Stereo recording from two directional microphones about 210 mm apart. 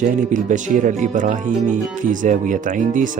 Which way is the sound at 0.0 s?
40° right (ahead or behind).